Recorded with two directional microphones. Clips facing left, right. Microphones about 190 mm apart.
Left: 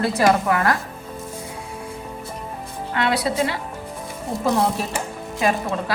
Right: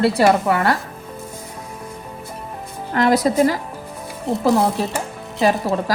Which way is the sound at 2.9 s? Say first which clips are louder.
Right 6 dB; 40° right (ahead or behind).